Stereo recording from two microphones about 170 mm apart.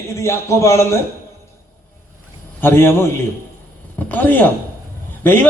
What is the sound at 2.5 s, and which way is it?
A man's voice, 15° left (ahead or behind).